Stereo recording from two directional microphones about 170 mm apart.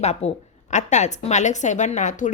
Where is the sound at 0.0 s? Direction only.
40° left (ahead or behind).